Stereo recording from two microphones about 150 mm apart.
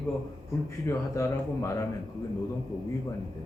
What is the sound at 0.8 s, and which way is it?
Speech, 20° left (ahead or behind).